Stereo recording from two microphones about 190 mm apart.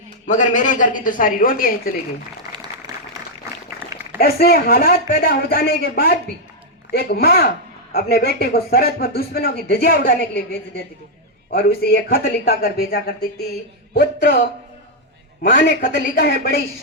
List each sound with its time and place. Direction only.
0.3 s speech: 40° left (ahead or behind)
2.5 s applause: 20° right (ahead or behind)
4.2 s a man's voice: 55° left (ahead or behind)
11.5 s a man's voice: 55° left (ahead or behind)
15.4 s a man's voice: 60° left (ahead or behind)